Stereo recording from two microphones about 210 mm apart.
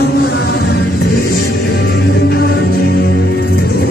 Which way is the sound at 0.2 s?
50° left (ahead or behind).